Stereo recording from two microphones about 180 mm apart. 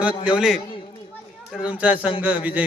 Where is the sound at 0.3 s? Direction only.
5° right (ahead or behind).